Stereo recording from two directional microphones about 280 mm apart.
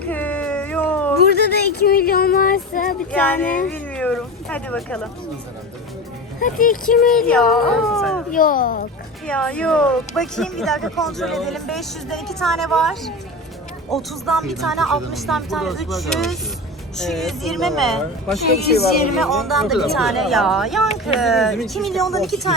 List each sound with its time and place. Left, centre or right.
0.0 s a sound: centre
1.2 s a sound: left
3.1 s speech: centre
6.4 s speech: left
7.1 s speech: centre
8.3 s speech: left
9.2 s speech: centre